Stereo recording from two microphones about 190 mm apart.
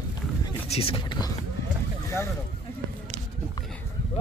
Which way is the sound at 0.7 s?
30° left (ahead or behind).